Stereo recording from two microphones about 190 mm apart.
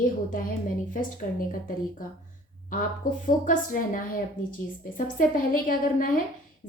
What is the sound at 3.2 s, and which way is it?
A woman's voice, 45° left (ahead or behind).